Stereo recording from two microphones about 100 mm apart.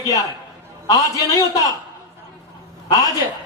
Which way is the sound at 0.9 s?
35° left (ahead or behind).